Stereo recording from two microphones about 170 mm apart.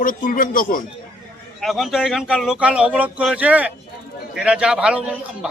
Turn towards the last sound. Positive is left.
turn(degrees=-5)  # may be behind; listen again after turning